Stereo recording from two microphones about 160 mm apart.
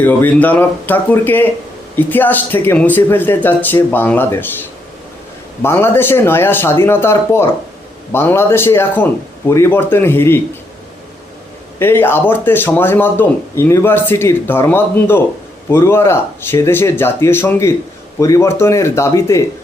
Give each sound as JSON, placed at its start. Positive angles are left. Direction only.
{"t": 0.0, "sound": "speech", "side_deg": 10}
{"t": 5.6, "sound": "speech", "side_deg": 15}
{"t": 11.8, "sound": "speech", "side_deg": 15}